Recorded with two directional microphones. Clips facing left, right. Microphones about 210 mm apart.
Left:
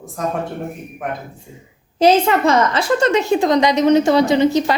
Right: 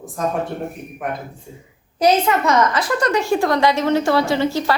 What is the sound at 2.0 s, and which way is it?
A woman's voice, 30° left (ahead or behind).